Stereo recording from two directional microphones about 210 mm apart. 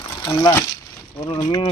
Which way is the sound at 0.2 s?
15° left (ahead or behind).